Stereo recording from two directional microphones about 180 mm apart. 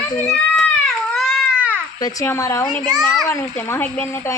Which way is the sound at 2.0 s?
20° left (ahead or behind).